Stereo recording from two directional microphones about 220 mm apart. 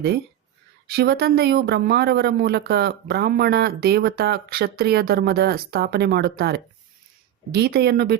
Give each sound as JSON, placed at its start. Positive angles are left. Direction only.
{"t": 0.9, "sound": "speech", "side_deg": -45}